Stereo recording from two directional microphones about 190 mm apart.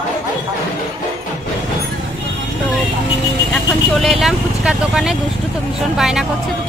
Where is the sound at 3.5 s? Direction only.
Centre (ahead or behind).